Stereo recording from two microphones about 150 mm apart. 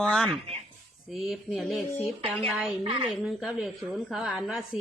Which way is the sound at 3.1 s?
5° right (ahead or behind).